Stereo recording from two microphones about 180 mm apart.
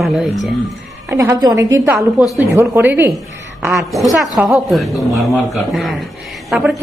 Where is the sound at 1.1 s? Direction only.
15° right (ahead or behind).